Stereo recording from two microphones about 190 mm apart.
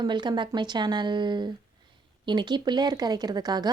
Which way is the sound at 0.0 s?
25° right (ahead or behind).